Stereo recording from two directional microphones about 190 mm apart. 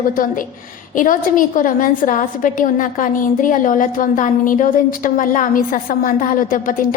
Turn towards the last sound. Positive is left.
turn(degrees=45)  # may be behind; listen again after turning